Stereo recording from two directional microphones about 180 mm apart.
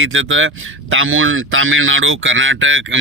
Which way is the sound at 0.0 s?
90° right.